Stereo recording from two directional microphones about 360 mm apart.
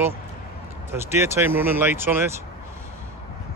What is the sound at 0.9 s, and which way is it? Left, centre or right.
Speech, centre.